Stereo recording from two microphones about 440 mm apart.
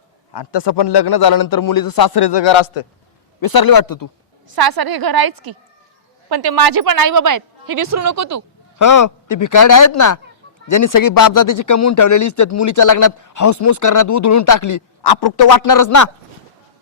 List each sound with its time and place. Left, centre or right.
0.3 s a man's voice: left
3.4 s speech: left
4.5 s a woman's voice: right
8.8 s speech: left
15.0 s speech: left